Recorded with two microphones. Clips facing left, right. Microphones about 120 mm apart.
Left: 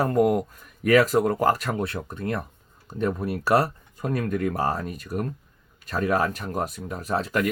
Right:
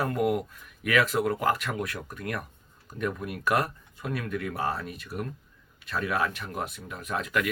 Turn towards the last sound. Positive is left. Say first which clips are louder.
# left 4 dB
turn(degrees=35)  # may be behind; listen again after turning